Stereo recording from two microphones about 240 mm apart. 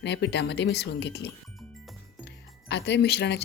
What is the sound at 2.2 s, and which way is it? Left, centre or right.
Music, left.